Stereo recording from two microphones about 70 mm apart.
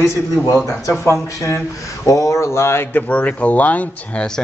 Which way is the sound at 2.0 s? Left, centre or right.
Left.